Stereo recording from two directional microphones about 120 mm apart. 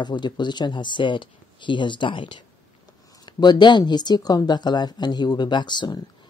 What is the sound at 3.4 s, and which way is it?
Speech, 35° left (ahead or behind).